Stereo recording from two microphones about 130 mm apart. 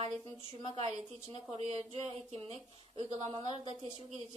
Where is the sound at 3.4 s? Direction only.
40° left (ahead or behind).